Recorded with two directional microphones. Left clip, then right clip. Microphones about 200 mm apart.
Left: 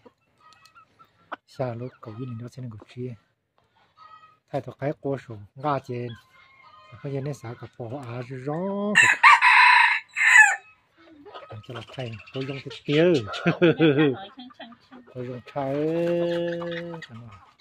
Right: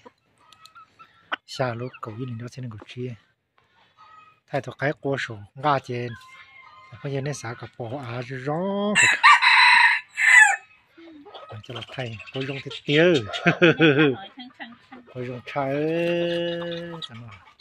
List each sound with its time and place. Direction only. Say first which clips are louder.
1.3 s fowl: right 4 dB; centre (ahead or behind)
2.0 s speech: right 4 dB; centre (ahead or behind)
4.5 s speech: right 3 dB; centre (ahead or behind)
11.5 s speech: right 4 dB; centre (ahead or behind)
14.4 s a sound: right 2 dB; 65° left (ahead or behind)
15.1 s speech: right 3 dB; 5° right (ahead or behind)